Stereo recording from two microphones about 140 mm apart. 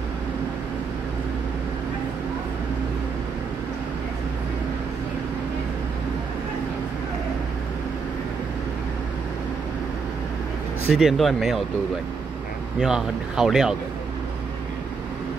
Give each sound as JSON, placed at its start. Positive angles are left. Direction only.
{"t": 10.9, "sound": "speech", "side_deg": -5}
{"t": 12.8, "sound": "speech", "side_deg": -5}